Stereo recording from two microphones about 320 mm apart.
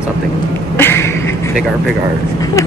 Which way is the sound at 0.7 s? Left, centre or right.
Centre.